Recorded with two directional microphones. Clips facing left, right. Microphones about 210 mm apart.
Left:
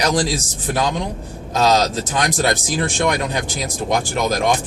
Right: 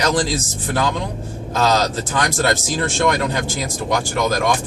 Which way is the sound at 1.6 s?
15° left (ahead or behind).